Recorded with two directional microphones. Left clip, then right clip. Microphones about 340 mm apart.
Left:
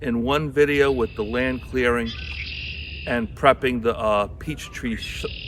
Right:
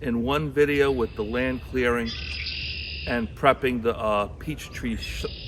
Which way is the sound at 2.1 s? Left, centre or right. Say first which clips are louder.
Even; left.